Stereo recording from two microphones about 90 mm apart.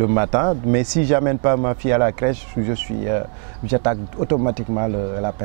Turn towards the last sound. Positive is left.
turn(degrees=-20)  # may be behind; listen again after turning